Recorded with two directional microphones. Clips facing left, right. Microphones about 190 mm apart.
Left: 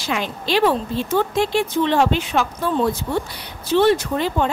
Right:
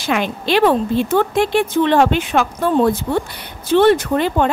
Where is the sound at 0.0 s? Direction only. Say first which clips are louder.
Right 5 dB; 60° right (ahead or behind).